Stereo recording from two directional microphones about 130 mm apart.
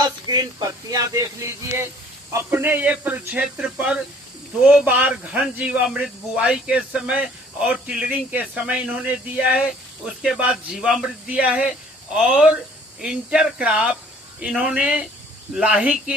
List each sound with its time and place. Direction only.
0.0 s speech: 30° right (ahead or behind); by 16.1 s 10° right (ahead or behind)